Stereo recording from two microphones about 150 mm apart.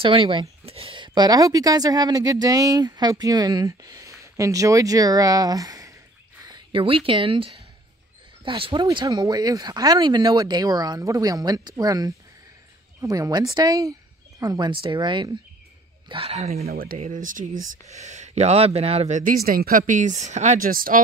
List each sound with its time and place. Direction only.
0.0 s a woman's voice: 35° right (ahead or behind)
8.8 s a woman's voice: 25° right (ahead or behind); by 16.6 s 45° right (ahead or behind)
16.6 s speech: 75° right (ahead or behind)
17.0 s speech: 60° right (ahead or behind)
19.4 s speech: 75° right (ahead or behind)